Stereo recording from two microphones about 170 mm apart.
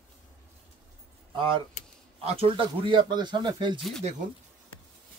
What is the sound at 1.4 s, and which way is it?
Speech, 30° right (ahead or behind).